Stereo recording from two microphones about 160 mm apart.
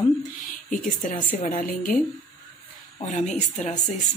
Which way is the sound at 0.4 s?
55° left (ahead or behind).